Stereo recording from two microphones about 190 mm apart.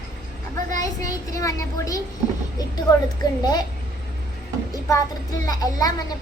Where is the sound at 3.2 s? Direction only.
20° left (ahead or behind).